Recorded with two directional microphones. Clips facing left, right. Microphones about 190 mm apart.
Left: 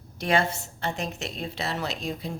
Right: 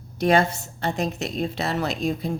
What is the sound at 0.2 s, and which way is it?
A woman's voice, 40° right (ahead or behind).